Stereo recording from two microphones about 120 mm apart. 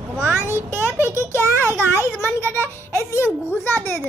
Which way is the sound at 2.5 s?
20° left (ahead or behind).